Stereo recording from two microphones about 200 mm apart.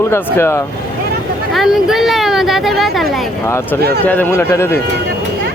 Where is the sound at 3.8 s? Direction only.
55° right (ahead or behind).